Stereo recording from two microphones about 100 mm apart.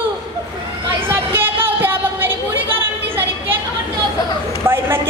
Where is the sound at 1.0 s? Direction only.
20° right (ahead or behind).